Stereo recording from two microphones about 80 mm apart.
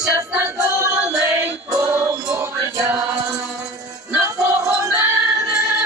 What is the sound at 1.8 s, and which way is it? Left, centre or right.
Music, right.